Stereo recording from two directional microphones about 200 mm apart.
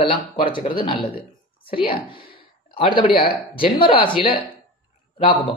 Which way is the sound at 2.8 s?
25° left (ahead or behind).